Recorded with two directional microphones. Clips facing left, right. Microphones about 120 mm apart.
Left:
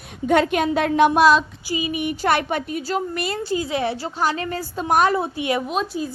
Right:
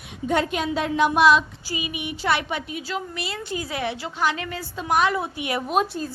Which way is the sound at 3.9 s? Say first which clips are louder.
Left 2 dB; 35° left (ahead or behind).